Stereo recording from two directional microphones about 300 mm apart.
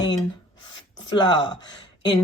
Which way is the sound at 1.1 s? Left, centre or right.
Centre.